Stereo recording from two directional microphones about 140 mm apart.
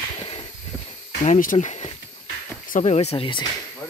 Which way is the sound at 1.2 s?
65° left (ahead or behind).